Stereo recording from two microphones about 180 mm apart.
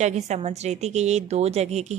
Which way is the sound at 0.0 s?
40° right (ahead or behind).